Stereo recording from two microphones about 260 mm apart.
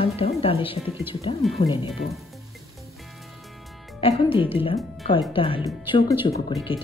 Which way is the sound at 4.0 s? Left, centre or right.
Centre.